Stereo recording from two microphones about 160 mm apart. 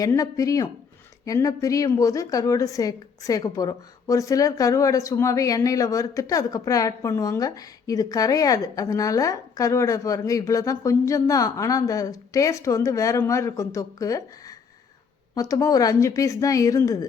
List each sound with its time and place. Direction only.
0.0 s a woman's voice: 20° left (ahead or behind)